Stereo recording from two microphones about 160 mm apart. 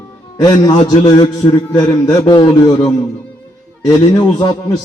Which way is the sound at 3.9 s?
25° left (ahead or behind).